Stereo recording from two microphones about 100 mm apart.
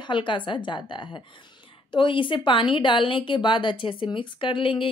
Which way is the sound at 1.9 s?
55° left (ahead or behind).